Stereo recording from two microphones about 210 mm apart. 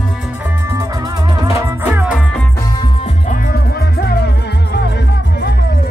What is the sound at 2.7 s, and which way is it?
Music, 20° left (ahead or behind).